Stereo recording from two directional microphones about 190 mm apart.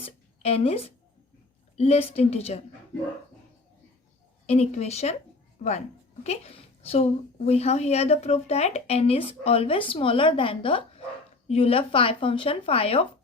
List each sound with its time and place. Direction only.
0.0 s a woman's voice: 30° left (ahead or behind)
4.4 s a woman's voice: 35° left (ahead or behind)
6.2 s a woman's voice: 35° left (ahead or behind)